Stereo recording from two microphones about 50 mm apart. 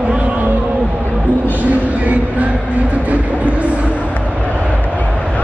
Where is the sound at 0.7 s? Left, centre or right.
Centre.